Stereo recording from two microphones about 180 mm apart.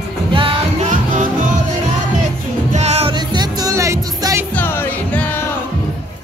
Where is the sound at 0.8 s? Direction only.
45° right (ahead or behind).